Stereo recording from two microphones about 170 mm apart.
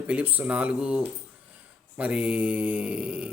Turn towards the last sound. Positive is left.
turn(degrees=-5)  # may be behind; listen again after turning